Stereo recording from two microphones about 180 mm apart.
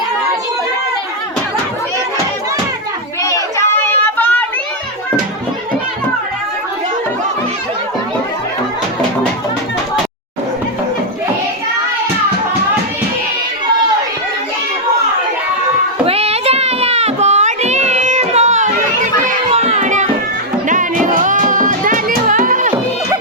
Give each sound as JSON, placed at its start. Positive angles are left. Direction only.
{"t": 3.2, "sound": "children playing", "side_deg": 15}
{"t": 16.0, "sound": "child singing", "side_deg": -35}
{"t": 19.5, "sound": "music", "side_deg": -35}